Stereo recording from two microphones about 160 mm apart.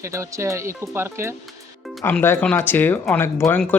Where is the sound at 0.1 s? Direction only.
20° right (ahead or behind).